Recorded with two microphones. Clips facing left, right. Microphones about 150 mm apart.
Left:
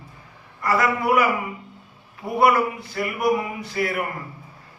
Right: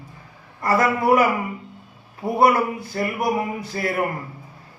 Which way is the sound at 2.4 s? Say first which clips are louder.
Right 1 dB; 35° right (ahead or behind).